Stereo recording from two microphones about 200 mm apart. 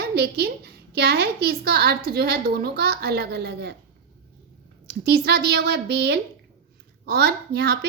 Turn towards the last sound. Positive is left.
turn(degrees=-55)  # may be behind; listen again after turning